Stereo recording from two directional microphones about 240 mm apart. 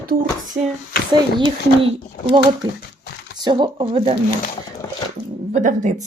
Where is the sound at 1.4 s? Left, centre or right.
Centre.